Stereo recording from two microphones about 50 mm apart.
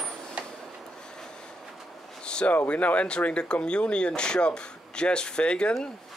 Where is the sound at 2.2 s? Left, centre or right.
Centre.